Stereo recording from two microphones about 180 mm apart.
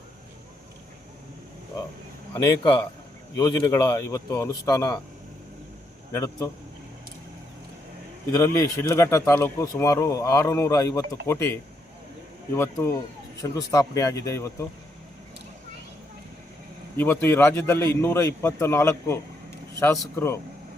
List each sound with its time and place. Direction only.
2.3 s speech: 20° left (ahead or behind)
6.1 s speech: 15° left (ahead or behind)
8.3 s speech: 15° left (ahead or behind)
17.0 s speech: 10° left (ahead or behind)